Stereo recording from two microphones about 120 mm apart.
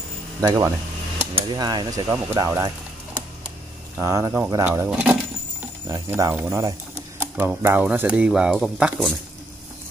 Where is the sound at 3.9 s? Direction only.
25° right (ahead or behind).